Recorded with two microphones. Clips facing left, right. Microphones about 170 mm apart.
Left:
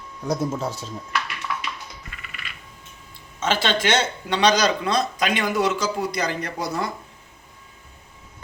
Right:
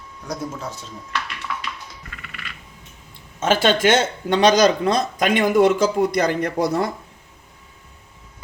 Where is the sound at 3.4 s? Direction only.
50° right (ahead or behind).